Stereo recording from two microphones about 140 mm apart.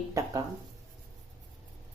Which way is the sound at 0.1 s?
25° right (ahead or behind).